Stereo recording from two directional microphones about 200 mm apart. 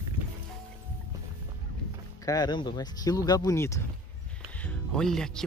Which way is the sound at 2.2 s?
20° left (ahead or behind).